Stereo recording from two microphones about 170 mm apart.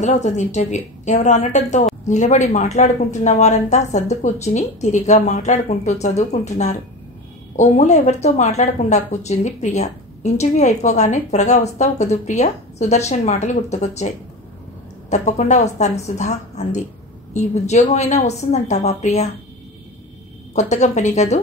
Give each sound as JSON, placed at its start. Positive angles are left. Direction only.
{"t": 0.0, "sound": "speech", "side_deg": 45}
{"t": 20.5, "sound": "speech", "side_deg": 40}